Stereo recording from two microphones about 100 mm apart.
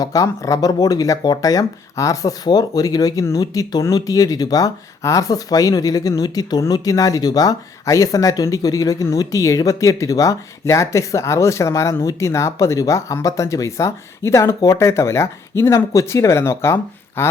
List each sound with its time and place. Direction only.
0.0 s speech: 35° left (ahead or behind)